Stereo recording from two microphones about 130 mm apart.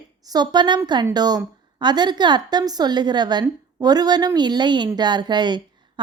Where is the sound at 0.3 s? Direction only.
35° right (ahead or behind).